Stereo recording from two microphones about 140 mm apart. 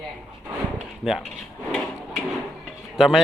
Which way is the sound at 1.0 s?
5° right (ahead or behind).